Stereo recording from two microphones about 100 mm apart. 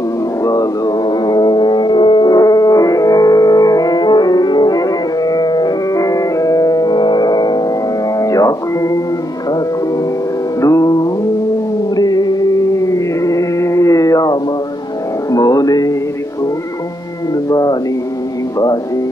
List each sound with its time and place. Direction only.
0.5 s music: 40° left (ahead or behind)
8.2 s music: 35° left (ahead or behind)
10.6 s music: 35° left (ahead or behind)
17.5 s music: 40° left (ahead or behind)